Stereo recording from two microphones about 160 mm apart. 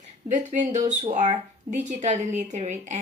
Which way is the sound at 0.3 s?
50° right (ahead or behind).